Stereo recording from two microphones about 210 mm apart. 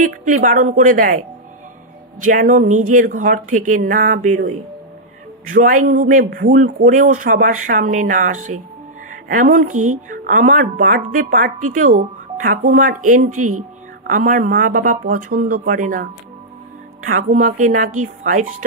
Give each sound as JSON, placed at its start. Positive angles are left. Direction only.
{"t": 0.0, "sound": "a woman's voice", "side_deg": -40}
{"t": 5.5, "sound": "a woman's voice", "side_deg": -40}
{"t": 17.0, "sound": "speech", "side_deg": -75}
{"t": 17.3, "sound": "a woman's voice", "side_deg": -40}